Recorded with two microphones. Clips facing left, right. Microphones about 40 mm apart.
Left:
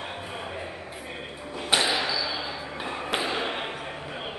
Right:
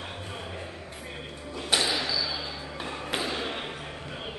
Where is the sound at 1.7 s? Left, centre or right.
Left.